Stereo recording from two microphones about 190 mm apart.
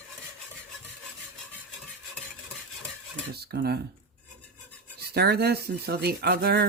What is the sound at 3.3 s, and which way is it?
Speech, 55° right (ahead or behind).